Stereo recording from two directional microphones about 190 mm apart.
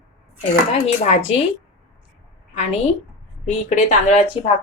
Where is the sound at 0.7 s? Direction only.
35° left (ahead or behind).